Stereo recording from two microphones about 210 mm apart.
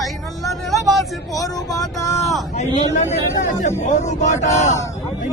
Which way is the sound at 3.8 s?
35° left (ahead or behind).